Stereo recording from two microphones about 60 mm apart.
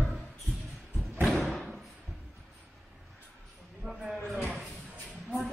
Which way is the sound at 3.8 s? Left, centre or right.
Right.